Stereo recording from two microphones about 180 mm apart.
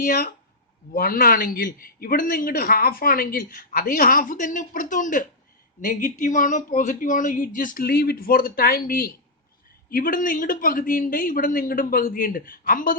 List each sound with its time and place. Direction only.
0.0 s a man's voice: 55° left (ahead or behind)